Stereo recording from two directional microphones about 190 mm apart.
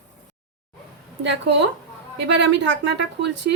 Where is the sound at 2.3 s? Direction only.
70° right (ahead or behind).